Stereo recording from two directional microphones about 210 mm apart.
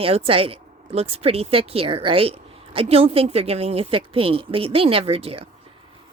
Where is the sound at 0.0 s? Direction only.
25° right (ahead or behind).